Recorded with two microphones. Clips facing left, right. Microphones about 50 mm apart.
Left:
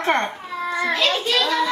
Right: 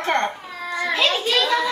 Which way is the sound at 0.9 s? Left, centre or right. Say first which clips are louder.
Right 2 dB; centre.